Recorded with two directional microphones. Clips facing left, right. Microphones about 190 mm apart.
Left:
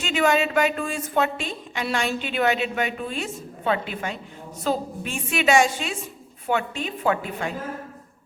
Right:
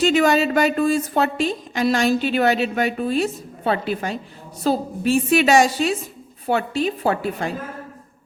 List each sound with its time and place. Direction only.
0.0 s a woman's voice: 40° right (ahead or behind)